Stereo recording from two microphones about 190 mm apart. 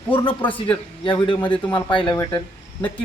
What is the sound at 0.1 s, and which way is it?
Speech, 25° left (ahead or behind).